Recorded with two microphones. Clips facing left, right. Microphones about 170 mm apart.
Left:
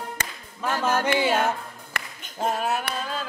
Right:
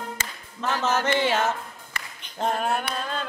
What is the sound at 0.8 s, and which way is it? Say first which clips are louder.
Speech: left 1 dB; 10° left (ahead or behind).